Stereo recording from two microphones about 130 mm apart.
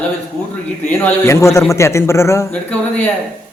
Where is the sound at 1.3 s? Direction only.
20° left (ahead or behind).